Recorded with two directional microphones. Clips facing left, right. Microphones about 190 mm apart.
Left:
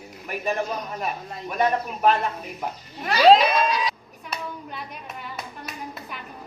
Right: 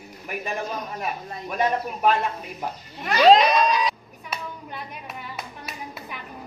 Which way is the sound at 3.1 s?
5° left (ahead or behind).